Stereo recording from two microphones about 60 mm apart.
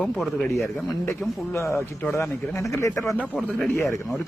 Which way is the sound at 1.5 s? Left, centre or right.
Left.